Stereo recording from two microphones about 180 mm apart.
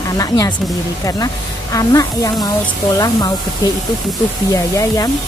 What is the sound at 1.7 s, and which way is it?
Speech, 20° left (ahead or behind).